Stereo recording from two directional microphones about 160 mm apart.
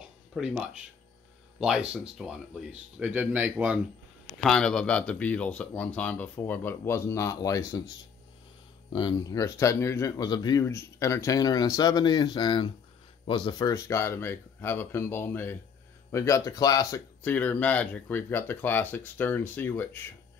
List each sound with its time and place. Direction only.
0.3 s speech: 5° right (ahead or behind)
4.4 s speech: 5° left (ahead or behind); by 7.8 s 20° left (ahead or behind)
8.9 s speech: 25° left (ahead or behind)
17.2 s speech: 10° left (ahead or behind)